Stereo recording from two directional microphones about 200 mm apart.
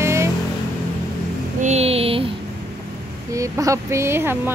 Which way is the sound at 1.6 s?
35° right (ahead or behind).